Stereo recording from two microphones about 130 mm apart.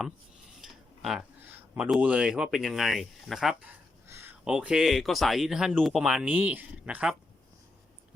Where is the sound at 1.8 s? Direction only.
5° right (ahead or behind).